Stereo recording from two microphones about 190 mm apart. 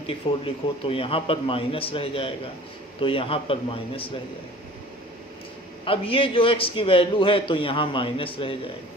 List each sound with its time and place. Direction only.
0.1 s a man's voice: 30° left (ahead or behind)
5.8 s a man's voice: 30° left (ahead or behind)